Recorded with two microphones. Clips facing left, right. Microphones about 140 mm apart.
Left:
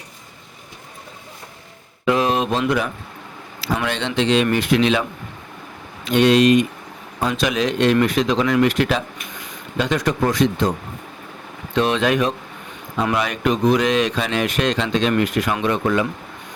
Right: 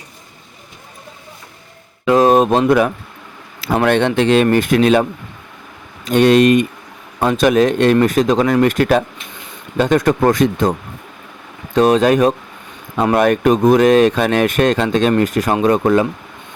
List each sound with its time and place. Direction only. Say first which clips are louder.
2.1 s speech: right 10 dB; 45° right (ahead or behind)
6.1 s speech: right 3 dB; 50° right (ahead or behind)